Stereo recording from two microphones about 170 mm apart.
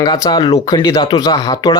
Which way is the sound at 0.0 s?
25° left (ahead or behind).